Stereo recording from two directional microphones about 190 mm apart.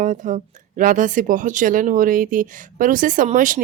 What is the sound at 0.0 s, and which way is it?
Speech, 45° right (ahead or behind).